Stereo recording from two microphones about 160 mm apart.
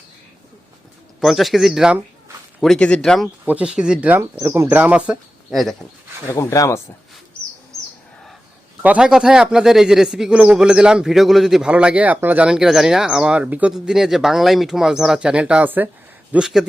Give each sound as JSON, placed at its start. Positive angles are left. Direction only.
{"t": 1.2, "sound": "a man's voice", "side_deg": 0}
{"t": 3.4, "sound": "speech", "side_deg": -10}
{"t": 6.2, "sound": "speech", "side_deg": 15}
{"t": 8.8, "sound": "a man's voice", "side_deg": -5}